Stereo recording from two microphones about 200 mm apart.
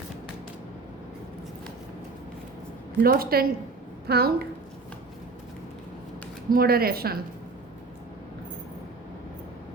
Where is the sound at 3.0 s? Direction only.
50° right (ahead or behind).